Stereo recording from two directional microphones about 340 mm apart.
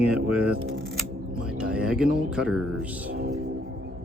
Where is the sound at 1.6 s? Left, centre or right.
Centre.